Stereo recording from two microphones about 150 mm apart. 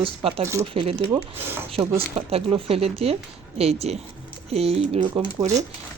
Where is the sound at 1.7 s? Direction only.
40° right (ahead or behind).